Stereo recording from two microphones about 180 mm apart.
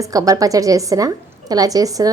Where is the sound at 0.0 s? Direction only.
20° right (ahead or behind).